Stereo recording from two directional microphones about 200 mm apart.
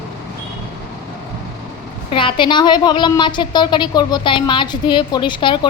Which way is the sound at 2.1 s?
25° left (ahead or behind).